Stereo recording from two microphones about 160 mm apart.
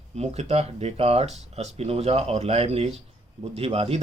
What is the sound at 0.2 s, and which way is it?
Speech, 40° right (ahead or behind).